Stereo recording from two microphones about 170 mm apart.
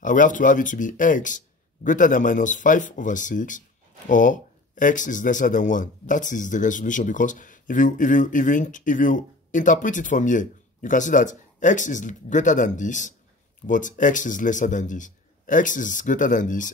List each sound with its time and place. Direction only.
0.0 s speech: 50° left (ahead or behind)